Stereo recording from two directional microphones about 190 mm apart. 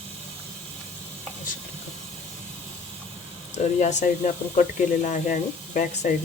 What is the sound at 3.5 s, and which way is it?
Speech, 35° left (ahead or behind).